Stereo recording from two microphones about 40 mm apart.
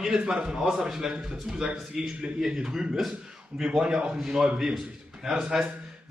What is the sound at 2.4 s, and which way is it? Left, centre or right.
A man's voice, centre.